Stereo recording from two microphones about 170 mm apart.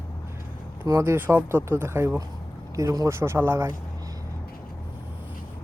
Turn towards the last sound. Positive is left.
turn(degrees=-15)  # may be behind; listen again after turning